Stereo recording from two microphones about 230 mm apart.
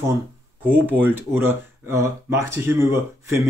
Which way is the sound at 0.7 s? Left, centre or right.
Centre.